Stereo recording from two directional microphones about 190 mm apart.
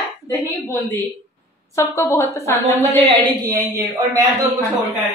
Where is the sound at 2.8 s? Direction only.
30° right (ahead or behind).